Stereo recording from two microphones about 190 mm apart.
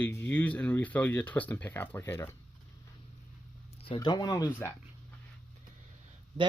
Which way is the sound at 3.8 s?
25° left (ahead or behind).